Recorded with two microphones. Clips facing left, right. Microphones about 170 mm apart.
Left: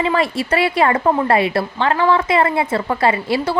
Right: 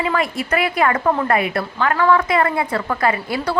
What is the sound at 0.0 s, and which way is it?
A woman's voice, 30° left (ahead or behind).